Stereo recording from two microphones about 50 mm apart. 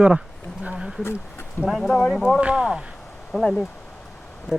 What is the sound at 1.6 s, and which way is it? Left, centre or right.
Speech, centre.